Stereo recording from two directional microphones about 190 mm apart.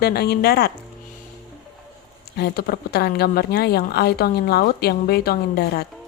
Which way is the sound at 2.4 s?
55° left (ahead or behind).